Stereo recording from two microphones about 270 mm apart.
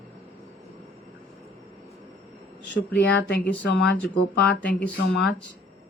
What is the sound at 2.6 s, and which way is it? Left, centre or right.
Speech, left.